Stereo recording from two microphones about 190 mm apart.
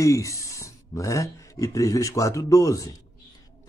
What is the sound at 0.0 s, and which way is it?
A man's voice, 15° left (ahead or behind).